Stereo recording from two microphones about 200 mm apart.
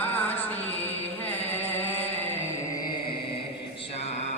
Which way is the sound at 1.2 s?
10° left (ahead or behind).